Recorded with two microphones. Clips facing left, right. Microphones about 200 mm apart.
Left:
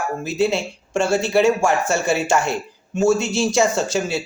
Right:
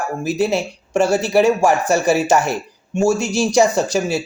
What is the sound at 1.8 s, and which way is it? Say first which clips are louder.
Speech: right 4 dB; 15° right (ahead or behind).